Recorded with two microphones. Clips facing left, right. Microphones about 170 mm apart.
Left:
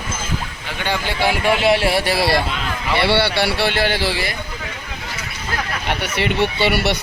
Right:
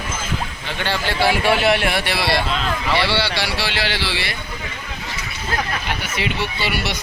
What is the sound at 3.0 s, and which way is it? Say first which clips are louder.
Speech: left 4 dB; 60° left (ahead or behind).